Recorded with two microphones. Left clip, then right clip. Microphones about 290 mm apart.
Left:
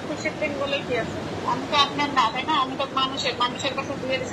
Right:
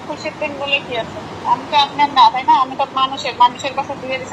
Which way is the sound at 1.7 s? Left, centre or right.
Centre.